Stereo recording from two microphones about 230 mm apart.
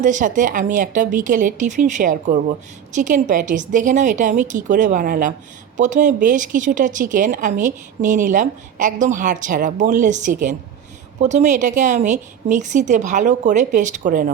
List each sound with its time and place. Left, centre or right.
0.0 s a woman's voice: right